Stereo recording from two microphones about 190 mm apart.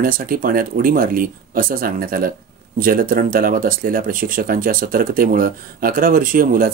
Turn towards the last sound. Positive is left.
turn(degrees=-50)  # may be behind; listen again after turning